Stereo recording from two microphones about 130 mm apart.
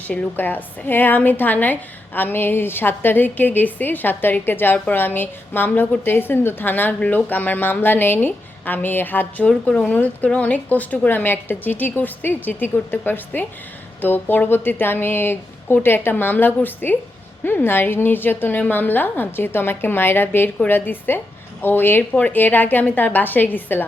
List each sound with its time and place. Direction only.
0.1 s a woman's voice: 15° left (ahead or behind)